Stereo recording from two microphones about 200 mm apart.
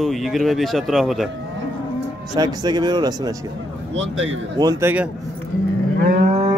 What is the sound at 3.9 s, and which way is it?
Speech, 70° right (ahead or behind).